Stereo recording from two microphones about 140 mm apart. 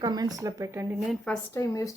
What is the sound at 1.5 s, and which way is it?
Speech, 20° left (ahead or behind).